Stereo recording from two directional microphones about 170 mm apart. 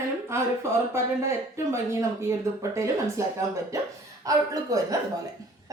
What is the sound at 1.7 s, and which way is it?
A woman's voice, 15° right (ahead or behind).